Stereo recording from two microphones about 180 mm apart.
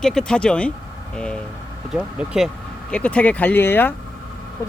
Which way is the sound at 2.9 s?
5° left (ahead or behind).